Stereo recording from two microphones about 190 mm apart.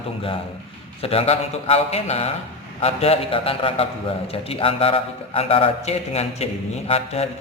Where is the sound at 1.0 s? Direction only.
30° left (ahead or behind).